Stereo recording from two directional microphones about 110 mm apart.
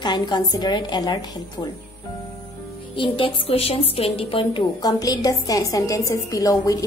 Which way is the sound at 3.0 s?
55° left (ahead or behind).